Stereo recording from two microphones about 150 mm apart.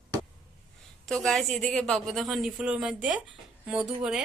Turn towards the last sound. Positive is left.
turn(degrees=-5)  # may be behind; listen again after turning